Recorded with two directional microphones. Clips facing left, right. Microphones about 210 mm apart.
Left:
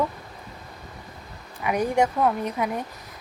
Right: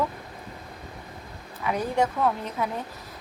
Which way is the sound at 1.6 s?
15° left (ahead or behind).